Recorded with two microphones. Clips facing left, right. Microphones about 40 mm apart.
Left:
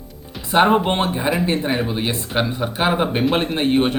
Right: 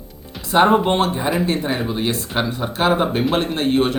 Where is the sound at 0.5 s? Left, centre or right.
Centre.